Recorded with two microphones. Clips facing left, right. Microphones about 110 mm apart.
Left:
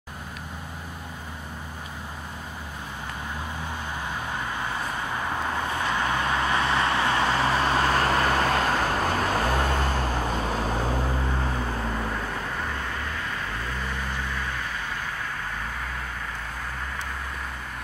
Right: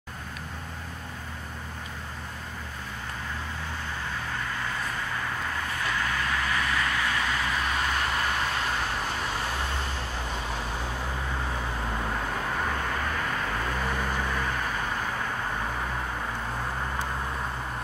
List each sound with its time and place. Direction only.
4.3 s vehicle: 20° left (ahead or behind); by 8.1 s 40° left (ahead or behind)
8.1 s vehicle: 65° left (ahead or behind)